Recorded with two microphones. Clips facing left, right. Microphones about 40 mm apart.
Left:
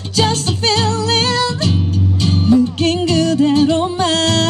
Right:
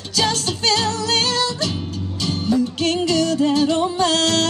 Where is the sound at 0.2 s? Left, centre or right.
Centre.